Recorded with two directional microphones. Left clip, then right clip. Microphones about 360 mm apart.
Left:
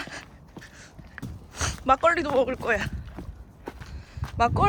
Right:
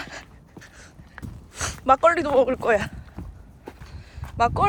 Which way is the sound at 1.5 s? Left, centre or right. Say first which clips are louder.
Right 3 dB; centre.